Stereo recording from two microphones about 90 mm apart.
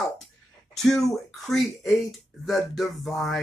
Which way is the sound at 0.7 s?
5° left (ahead or behind).